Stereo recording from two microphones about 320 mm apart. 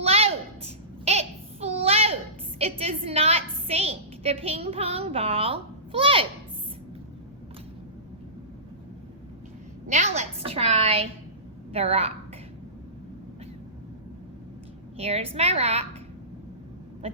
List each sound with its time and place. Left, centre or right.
0.0 s a sound: centre
2.6 s a woman's voice: centre
9.9 s a woman's voice: right
14.9 s a woman's voice: centre